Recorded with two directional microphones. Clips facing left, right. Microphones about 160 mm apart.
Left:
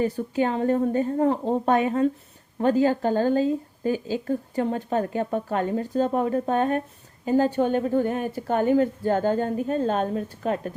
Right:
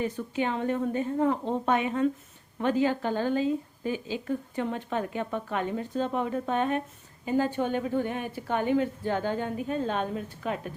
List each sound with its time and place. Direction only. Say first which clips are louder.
0.0 s a woman's voice: left 6 dB; 40° left (ahead or behind)